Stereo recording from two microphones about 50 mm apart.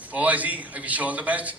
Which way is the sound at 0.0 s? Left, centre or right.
Right.